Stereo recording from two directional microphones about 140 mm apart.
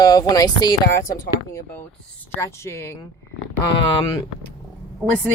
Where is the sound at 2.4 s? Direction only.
20° left (ahead or behind).